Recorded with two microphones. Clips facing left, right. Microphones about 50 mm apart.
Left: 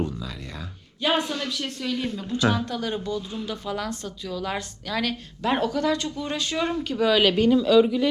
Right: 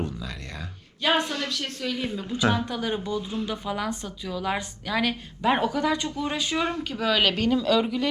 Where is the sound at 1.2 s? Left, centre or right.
Right.